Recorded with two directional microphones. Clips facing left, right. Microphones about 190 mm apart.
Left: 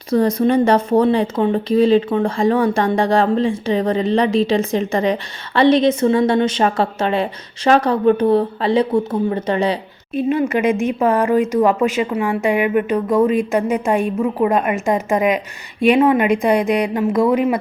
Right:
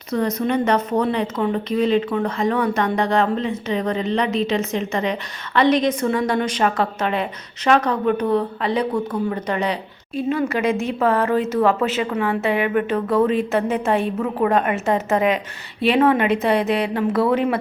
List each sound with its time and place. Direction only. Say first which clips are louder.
0.1 s a woman's voice: left 6 dB; 30° left (ahead or behind); by 17.6 s 10° left (ahead or behind)